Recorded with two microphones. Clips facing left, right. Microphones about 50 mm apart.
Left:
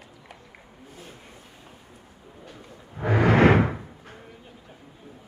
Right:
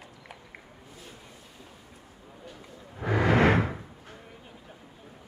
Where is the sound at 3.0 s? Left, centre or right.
Left.